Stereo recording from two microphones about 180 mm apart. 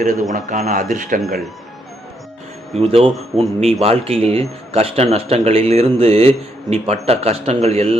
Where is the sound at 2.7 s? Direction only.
35° right (ahead or behind).